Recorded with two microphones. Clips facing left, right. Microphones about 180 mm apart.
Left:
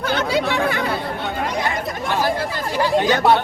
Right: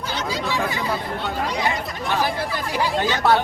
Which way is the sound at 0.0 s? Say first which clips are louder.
Left 6 dB; 60° left (ahead or behind).